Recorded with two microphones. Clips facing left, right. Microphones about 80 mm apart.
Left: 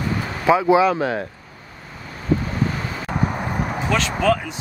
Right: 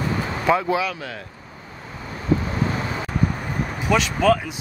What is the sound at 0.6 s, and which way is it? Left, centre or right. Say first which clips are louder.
Speech: left 8 dB; left.